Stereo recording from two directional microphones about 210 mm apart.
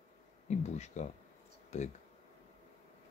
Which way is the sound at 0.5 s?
30° left (ahead or behind).